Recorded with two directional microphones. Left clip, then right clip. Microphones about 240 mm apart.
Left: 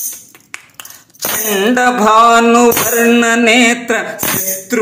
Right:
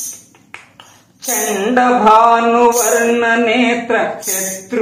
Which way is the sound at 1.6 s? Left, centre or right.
Left.